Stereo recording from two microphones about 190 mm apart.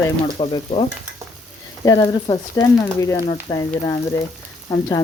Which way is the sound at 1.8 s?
20° left (ahead or behind).